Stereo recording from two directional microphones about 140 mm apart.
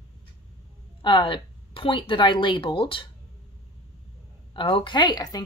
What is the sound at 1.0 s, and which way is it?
A woman's voice, 35° left (ahead or behind).